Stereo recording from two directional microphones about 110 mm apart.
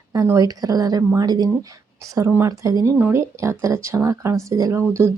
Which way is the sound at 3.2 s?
25° right (ahead or behind).